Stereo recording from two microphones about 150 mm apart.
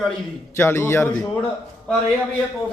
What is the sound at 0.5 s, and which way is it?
Speech, 15° left (ahead or behind).